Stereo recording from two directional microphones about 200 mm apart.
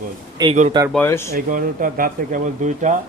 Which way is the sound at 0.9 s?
10° left (ahead or behind).